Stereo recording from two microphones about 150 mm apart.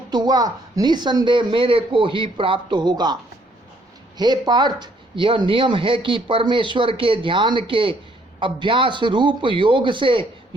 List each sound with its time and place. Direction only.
0.1 s speech: 25° right (ahead or behind)
4.2 s speech: 30° right (ahead or behind)